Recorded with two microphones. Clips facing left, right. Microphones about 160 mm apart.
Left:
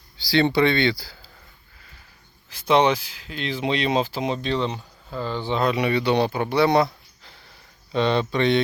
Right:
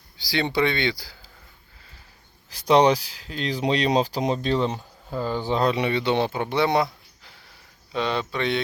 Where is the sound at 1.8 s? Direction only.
30° right (ahead or behind).